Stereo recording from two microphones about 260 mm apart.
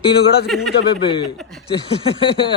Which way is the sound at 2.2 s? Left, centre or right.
Centre.